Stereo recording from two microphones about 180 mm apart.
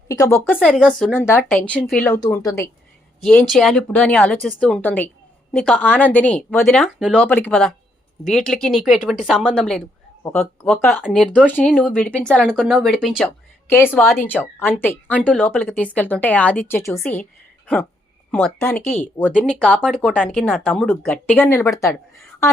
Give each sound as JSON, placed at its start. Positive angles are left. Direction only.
{"t": 0.1, "sound": "a woman's voice", "side_deg": 15}
{"t": 2.2, "sound": "speech", "side_deg": 20}
{"t": 3.2, "sound": "a woman's voice", "side_deg": 5}
{"t": 18.3, "sound": "a woman's voice", "side_deg": 5}